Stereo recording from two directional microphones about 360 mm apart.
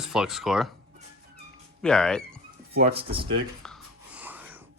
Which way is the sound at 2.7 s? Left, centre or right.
Centre.